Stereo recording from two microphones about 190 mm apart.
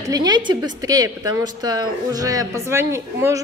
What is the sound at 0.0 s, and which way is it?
A woman's voice, 20° right (ahead or behind).